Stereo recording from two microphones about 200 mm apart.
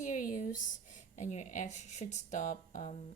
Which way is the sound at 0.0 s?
40° left (ahead or behind).